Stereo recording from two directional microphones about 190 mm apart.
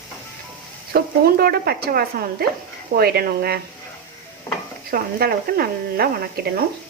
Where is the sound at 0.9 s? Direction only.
55° right (ahead or behind).